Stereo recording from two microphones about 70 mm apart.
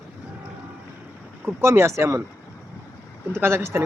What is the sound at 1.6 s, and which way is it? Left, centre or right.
Speech, right.